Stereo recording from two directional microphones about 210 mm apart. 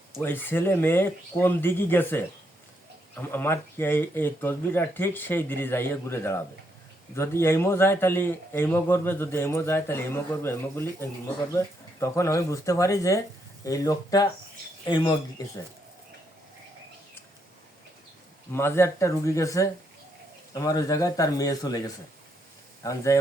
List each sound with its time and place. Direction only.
0.2 s speech: 10° left (ahead or behind)
18.5 s speech: 10° left (ahead or behind)